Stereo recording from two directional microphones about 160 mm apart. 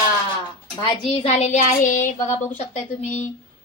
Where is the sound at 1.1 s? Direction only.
40° left (ahead or behind).